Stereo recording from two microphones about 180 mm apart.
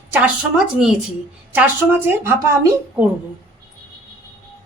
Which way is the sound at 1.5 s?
10° right (ahead or behind).